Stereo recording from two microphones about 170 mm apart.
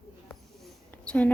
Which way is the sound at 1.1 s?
10° left (ahead or behind).